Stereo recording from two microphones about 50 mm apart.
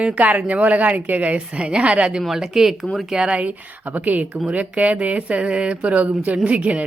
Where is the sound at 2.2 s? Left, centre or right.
Centre.